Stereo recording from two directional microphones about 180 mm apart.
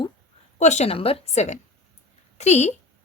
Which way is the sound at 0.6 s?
40° left (ahead or behind).